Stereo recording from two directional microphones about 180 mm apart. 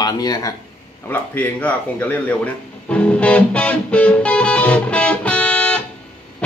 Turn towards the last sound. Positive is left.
turn(degrees=5)  # may be behind; listen again after turning